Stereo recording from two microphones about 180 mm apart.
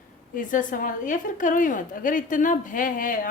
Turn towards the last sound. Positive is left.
turn(degrees=50)  # may be behind; listen again after turning